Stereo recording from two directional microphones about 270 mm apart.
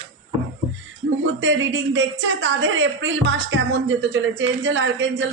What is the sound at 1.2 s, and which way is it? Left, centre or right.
Speech, right.